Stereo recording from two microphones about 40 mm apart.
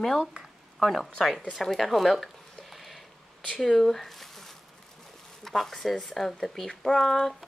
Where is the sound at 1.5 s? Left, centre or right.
Centre.